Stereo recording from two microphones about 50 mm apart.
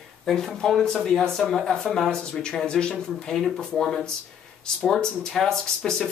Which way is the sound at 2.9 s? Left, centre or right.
Centre.